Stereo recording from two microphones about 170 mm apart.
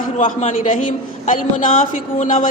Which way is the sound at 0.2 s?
50° left (ahead or behind).